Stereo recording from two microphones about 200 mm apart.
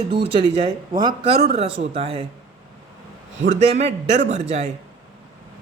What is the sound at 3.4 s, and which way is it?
A man's voice, 35° right (ahead or behind).